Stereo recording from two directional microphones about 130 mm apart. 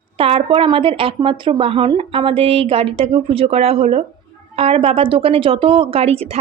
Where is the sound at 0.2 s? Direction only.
45° right (ahead or behind).